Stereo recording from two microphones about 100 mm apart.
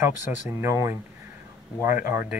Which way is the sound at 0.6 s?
25° right (ahead or behind).